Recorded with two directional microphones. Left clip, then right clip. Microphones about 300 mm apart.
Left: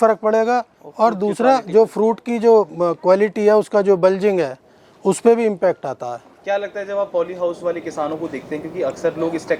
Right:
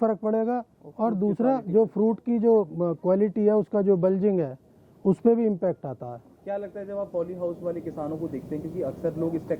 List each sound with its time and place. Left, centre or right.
0.0 s speech: centre
1.8 s speech: centre
2.2 s speech: centre